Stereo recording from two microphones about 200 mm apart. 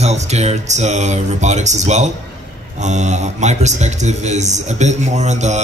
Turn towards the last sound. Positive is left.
turn(degrees=-35)  # may be behind; listen again after turning